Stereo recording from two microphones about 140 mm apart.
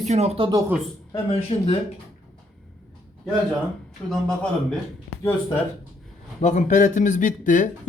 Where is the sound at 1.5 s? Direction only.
45° left (ahead or behind).